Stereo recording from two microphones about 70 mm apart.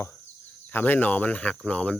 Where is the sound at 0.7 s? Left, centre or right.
Left.